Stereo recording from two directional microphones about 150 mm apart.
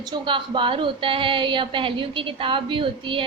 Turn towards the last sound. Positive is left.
turn(degrees=-35)  # may be behind; listen again after turning